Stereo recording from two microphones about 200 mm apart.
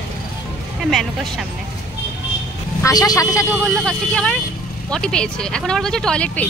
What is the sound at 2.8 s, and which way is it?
Speech, 15° left (ahead or behind).